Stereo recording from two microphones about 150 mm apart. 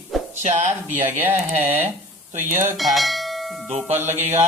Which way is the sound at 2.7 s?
Centre (ahead or behind).